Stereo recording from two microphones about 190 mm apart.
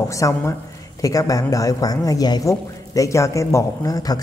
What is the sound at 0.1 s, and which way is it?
Speech, 15° left (ahead or behind).